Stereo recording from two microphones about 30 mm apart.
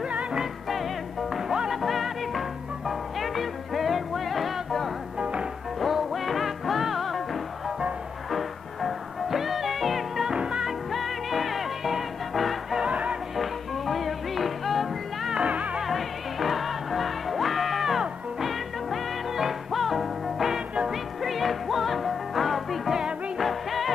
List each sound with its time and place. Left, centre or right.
1.7 s music: centre
5.2 s music: right
5.8 s music: centre
10.3 s music: right
10.9 s music: centre
12.8 s music: right
13.4 s music: centre
15.4 s music: right
15.8 s music: centre